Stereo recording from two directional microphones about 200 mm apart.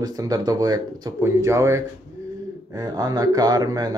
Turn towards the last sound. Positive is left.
turn(degrees=-20)  # may be behind; listen again after turning